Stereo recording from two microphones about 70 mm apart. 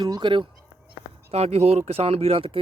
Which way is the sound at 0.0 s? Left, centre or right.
Right.